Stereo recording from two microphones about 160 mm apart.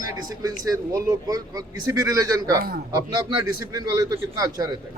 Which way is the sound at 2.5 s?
70° right (ahead or behind).